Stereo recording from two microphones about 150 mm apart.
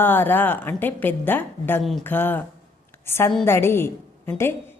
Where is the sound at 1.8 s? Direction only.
Centre (ahead or behind).